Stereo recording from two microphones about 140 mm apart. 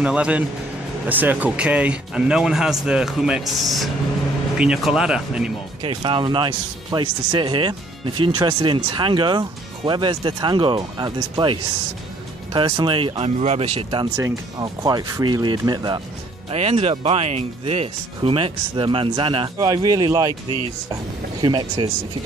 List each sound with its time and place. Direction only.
0.0 s speech: 10° right (ahead or behind)
5.8 s speech: 40° right (ahead or behind)
13.4 s speech: 50° right (ahead or behind)
14.1 s speech: 25° right (ahead or behind)
16.4 s speech: 45° right (ahead or behind)
19.7 s speech: 25° right (ahead or behind)
21.4 s speech: 35° right (ahead or behind)